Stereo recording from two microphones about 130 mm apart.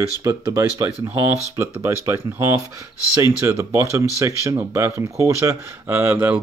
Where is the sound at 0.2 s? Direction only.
25° right (ahead or behind).